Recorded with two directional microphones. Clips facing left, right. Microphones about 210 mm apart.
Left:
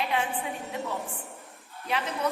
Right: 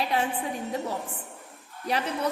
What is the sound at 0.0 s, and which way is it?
A woman's voice, 35° right (ahead or behind).